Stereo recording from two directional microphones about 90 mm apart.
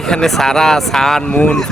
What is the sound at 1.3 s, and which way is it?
Speech, 15° left (ahead or behind).